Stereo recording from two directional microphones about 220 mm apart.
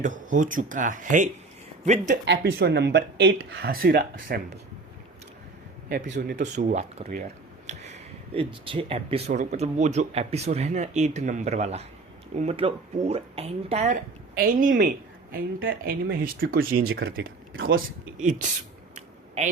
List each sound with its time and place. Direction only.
0.0 s speech: 35° right (ahead or behind)
2.2 s speech: 50° right (ahead or behind)
5.9 s speech: 40° right (ahead or behind)
7.7 s a sound: 30° right (ahead or behind)
8.6 s speech: 25° right (ahead or behind); by 16.6 s 40° right (ahead or behind)
16.9 s speech: 55° right (ahead or behind)
17.7 s speech: 40° right (ahead or behind)
18.9 s a sound: 30° right (ahead or behind)